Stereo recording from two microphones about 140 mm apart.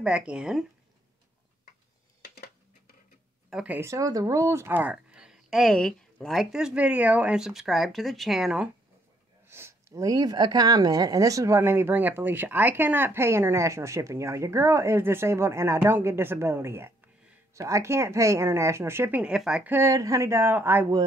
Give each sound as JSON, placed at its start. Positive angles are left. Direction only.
{"t": 0.0, "sound": "speech", "side_deg": -5}
{"t": 3.4, "sound": "speech", "side_deg": -5}
{"t": 9.5, "sound": "speech", "side_deg": -20}